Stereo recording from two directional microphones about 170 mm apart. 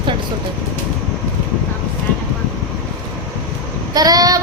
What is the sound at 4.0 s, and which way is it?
Speech, 20° right (ahead or behind).